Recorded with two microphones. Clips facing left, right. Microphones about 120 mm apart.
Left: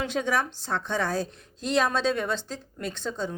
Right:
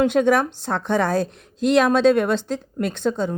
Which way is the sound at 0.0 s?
60° right (ahead or behind).